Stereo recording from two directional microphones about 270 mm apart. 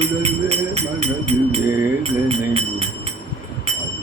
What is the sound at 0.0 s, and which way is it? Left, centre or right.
Speech, right.